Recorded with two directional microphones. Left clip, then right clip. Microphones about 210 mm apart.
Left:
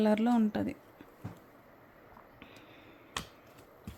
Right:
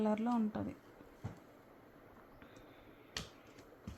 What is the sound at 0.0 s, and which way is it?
Speech, 35° left (ahead or behind).